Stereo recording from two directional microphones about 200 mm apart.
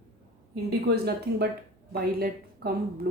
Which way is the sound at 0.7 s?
55° right (ahead or behind).